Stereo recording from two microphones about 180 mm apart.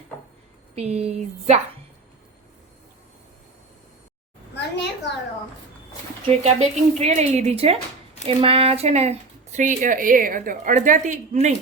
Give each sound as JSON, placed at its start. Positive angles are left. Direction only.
{"t": 0.8, "sound": "speech", "side_deg": -35}
{"t": 4.5, "sound": "a sound", "side_deg": 70}
{"t": 6.4, "sound": "speech", "side_deg": -35}